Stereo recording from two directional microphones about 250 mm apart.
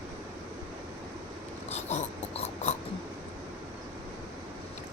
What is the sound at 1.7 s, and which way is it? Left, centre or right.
Snort, left.